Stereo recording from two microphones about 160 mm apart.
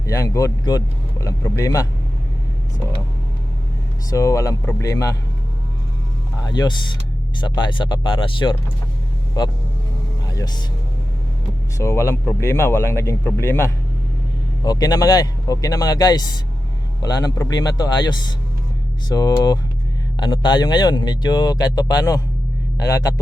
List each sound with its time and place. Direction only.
0.0 s a man's voice: 20° left (ahead or behind)
4.1 s a man's voice: 20° left (ahead or behind)
6.4 s a man's voice: 25° left (ahead or behind)
11.8 s a man's voice: 20° left (ahead or behind)